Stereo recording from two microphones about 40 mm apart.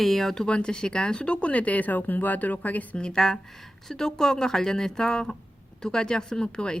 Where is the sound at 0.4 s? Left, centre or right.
Left.